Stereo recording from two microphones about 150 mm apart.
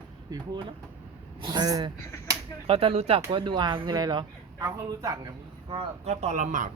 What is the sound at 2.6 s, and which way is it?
A woman's voice, 40° right (ahead or behind).